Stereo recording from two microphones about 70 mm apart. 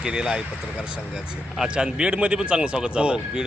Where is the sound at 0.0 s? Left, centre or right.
Centre.